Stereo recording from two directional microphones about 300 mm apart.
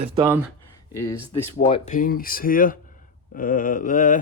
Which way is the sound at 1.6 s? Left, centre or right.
Left.